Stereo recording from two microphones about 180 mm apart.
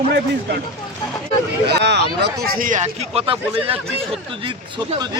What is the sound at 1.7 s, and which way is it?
A man's voice, 70° right (ahead or behind).